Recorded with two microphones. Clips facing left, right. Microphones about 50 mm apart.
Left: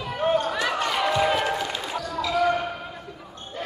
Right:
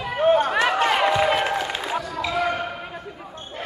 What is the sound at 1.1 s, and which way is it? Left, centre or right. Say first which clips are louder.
Run: right 2 dB; centre.